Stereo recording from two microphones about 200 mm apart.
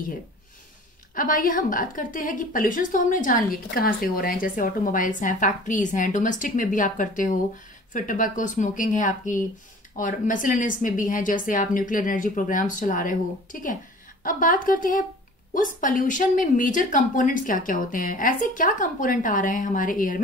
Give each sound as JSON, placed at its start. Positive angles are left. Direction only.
{"t": 1.1, "sound": "a woman's voice", "side_deg": 45}